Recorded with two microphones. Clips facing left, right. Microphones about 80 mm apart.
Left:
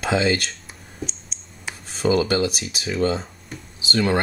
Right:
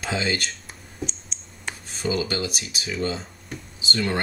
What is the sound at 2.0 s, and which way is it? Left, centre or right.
Speech, left.